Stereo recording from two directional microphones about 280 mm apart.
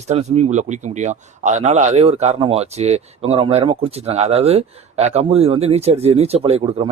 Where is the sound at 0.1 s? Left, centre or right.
Right.